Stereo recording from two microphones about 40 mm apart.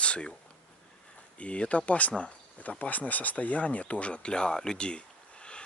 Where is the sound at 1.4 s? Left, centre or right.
Left.